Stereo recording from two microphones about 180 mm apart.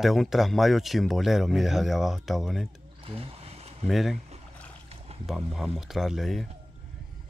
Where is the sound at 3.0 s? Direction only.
30° right (ahead or behind).